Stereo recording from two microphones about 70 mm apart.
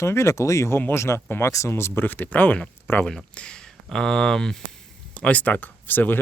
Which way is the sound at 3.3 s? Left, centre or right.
Centre.